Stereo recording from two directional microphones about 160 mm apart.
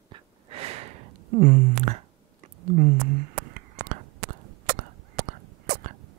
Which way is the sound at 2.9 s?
60° right (ahead or behind).